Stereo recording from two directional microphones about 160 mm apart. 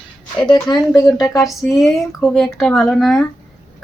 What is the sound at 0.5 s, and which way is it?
Speech, 25° left (ahead or behind).